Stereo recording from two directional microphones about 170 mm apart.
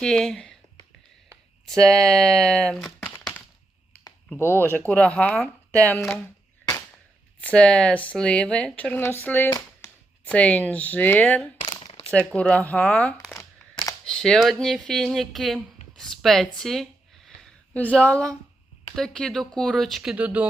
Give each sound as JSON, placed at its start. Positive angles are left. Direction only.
{"t": 0.0, "sound": "speech", "side_deg": 5}
{"t": 1.6, "sound": "a woman's voice", "side_deg": 5}
{"t": 7.4, "sound": "a woman's voice", "side_deg": 5}
{"t": 9.5, "sound": "a sound", "side_deg": 25}
{"t": 10.2, "sound": "a woman's voice", "side_deg": 5}
{"t": 11.8, "sound": "a sound", "side_deg": 35}
{"t": 12.3, "sound": "a woman's voice", "side_deg": 5}
{"t": 16.0, "sound": "a sound", "side_deg": 0}
{"t": 18.9, "sound": "speech", "side_deg": 5}